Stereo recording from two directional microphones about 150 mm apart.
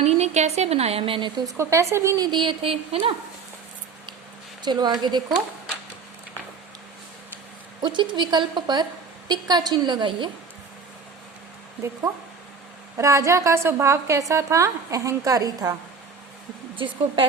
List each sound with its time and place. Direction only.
0.0 s a woman's voice: 45° right (ahead or behind)
1.5 s a woman's voice: 20° right (ahead or behind); by 3.2 s 40° right (ahead or behind)
4.6 s a woman's voice: 30° right (ahead or behind)
7.8 s a woman's voice: 30° right (ahead or behind)
13.0 s a woman's voice: 20° right (ahead or behind)
16.7 s speech: 35° right (ahead or behind)